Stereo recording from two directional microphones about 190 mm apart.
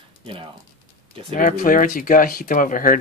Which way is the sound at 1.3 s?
45° left (ahead or behind).